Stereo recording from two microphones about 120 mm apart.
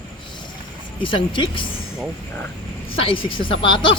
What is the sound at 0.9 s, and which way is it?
Speech, 45° left (ahead or behind).